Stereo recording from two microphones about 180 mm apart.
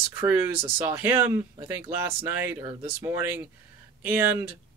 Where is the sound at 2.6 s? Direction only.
30° right (ahead or behind).